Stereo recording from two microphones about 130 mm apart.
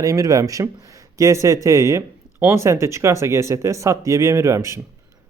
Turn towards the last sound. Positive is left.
turn(degrees=-20)  # may be behind; listen again after turning